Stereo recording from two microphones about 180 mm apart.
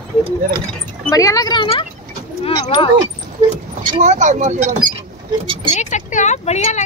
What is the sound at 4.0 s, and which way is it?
Speech, 40° right (ahead or behind).